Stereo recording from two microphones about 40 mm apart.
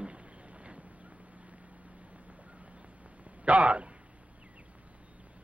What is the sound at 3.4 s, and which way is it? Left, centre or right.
Speech, right.